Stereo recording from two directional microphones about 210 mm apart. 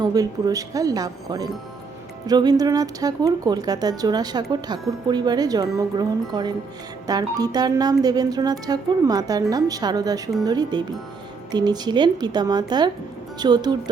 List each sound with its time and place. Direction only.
0.0 s speech: 20° right (ahead or behind)